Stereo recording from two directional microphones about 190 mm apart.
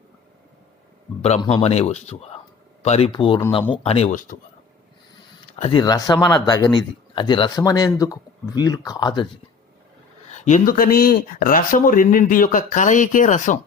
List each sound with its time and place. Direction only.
1.4 s speech: 30° left (ahead or behind)
5.5 s speech: 30° left (ahead or behind)
10.2 s speech: 40° left (ahead or behind)